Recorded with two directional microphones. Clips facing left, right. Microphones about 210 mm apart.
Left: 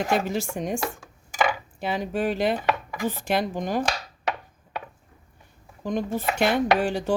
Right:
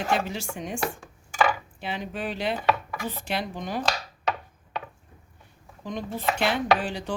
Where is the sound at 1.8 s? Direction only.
45° left (ahead or behind).